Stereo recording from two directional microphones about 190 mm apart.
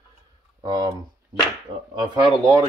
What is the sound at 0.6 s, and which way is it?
Speech, 20° right (ahead or behind).